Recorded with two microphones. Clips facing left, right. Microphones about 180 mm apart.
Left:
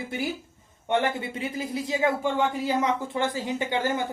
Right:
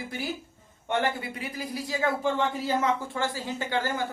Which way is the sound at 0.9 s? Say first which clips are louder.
Left 3 dB; 25° left (ahead or behind).